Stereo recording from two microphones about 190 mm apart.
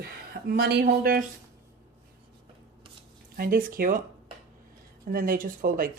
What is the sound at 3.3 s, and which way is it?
Speech, 50° right (ahead or behind).